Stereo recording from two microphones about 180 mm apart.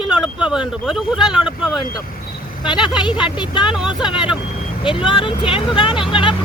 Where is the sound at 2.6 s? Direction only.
25° left (ahead or behind).